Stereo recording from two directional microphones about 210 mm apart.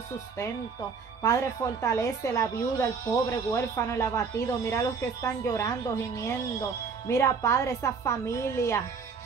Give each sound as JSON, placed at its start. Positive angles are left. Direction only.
{"t": 1.2, "sound": "a woman's voice", "side_deg": 15}